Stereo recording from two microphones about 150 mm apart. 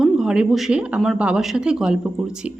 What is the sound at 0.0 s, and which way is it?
A woman's voice, 5° right (ahead or behind).